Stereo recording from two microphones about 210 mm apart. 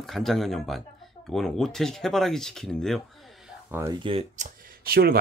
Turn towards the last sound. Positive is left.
turn(degrees=-45)  # may be behind; listen again after turning